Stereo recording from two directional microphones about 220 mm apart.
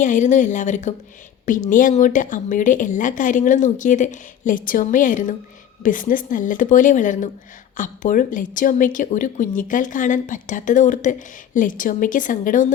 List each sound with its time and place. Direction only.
0.0 s a woman's voice: 35° left (ahead or behind)